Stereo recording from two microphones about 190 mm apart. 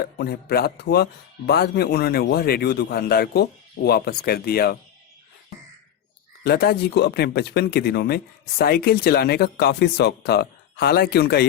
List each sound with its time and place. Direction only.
0.0 s speech: 55° left (ahead or behind)
6.4 s speech: 55° left (ahead or behind)